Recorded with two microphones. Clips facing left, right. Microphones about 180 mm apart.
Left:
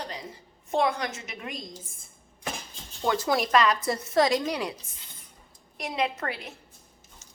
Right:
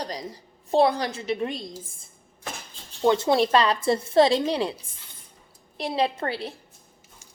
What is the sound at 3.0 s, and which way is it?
A woman's voice, 25° right (ahead or behind).